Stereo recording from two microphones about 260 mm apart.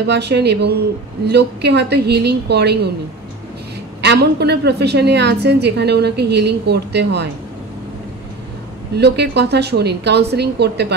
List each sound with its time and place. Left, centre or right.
0.0 s a woman's voice: right
4.0 s a woman's voice: right
8.9 s a woman's voice: right